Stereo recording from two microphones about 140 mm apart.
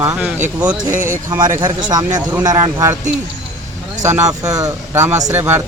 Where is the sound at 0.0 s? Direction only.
10° right (ahead or behind).